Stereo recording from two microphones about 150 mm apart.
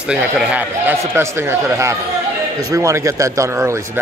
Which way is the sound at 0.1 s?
5° right (ahead or behind).